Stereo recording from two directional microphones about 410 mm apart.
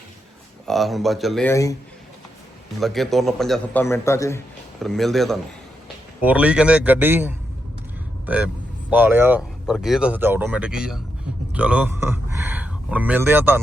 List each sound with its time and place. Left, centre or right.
0.6 s speech: centre
2.8 s speech: centre
8.9 s speech: centre